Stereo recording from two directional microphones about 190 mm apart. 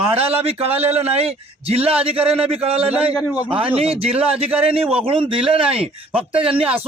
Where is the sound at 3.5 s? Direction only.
30° right (ahead or behind).